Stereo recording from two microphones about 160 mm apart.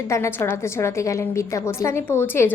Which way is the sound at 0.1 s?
15° left (ahead or behind).